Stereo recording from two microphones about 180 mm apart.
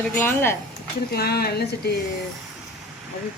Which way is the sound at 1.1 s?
60° left (ahead or behind).